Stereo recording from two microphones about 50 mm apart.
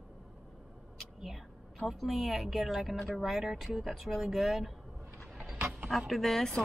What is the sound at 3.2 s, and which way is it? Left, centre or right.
A woman's voice, centre.